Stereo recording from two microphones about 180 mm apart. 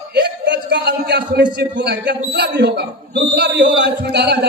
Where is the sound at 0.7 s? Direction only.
70° right (ahead or behind).